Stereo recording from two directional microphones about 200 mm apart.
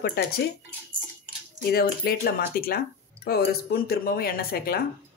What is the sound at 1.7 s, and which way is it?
Speech, 50° left (ahead or behind).